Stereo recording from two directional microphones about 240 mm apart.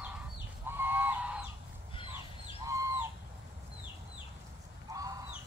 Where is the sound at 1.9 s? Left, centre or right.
Left.